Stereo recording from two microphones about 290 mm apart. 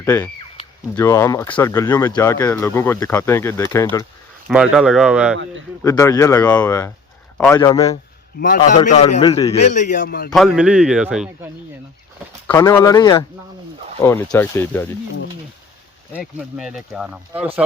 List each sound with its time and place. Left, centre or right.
0.0 s speech: centre
4.4 s speech: centre
5.8 s speech: centre
8.4 s a man's voice: left
9.1 s speech: centre
9.6 s a man's voice: left
10.3 s speech: centre
12.5 s speech: centre
16.1 s speech: centre